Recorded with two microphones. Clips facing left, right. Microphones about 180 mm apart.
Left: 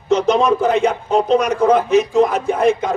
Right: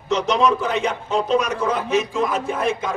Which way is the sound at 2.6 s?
35° left (ahead or behind).